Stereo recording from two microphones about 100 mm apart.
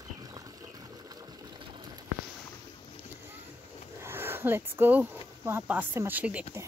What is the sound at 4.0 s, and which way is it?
Speech, 25° right (ahead or behind).